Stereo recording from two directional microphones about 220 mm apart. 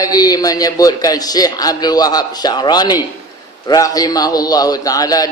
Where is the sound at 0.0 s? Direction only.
15° left (ahead or behind).